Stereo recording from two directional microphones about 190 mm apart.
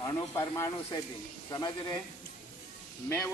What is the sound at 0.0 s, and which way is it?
A man's voice, 15° left (ahead or behind).